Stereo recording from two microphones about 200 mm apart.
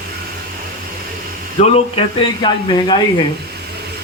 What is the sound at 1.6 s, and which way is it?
Speech, 30° left (ahead or behind).